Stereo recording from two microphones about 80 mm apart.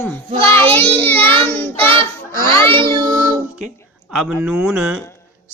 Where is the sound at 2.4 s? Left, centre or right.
Right.